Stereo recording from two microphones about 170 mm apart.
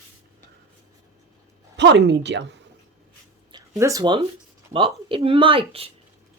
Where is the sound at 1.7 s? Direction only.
90° right.